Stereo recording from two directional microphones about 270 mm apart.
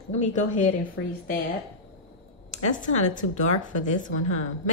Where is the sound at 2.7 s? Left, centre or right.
Left.